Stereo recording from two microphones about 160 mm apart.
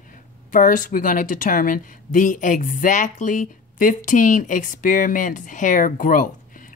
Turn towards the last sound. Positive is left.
turn(degrees=55)  # may be behind; listen again after turning